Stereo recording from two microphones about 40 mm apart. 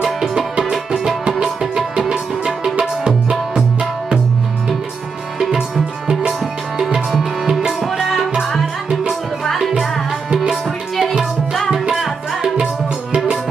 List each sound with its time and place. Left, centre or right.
0.0 s music: centre
3.2 s tabla: right
5.4 s music: centre
6.2 s tabla: centre
7.7 s music: centre
11.9 s tabla: centre